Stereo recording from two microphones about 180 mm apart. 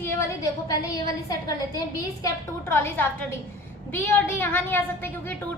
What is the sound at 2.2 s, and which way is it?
A woman's voice, 10° left (ahead or behind).